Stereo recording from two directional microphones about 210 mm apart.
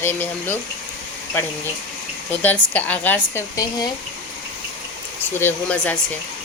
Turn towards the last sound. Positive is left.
turn(degrees=5)  # may be behind; listen again after turning